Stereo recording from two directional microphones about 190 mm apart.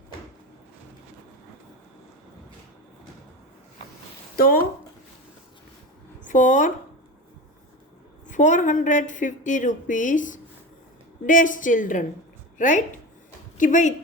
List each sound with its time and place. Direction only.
4.4 s speech: 50° left (ahead or behind)
6.2 s speech: 45° left (ahead or behind)
8.3 s a woman's voice: 40° left (ahead or behind)